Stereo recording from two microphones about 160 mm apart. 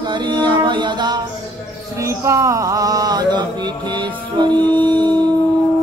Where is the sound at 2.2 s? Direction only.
20° right (ahead or behind).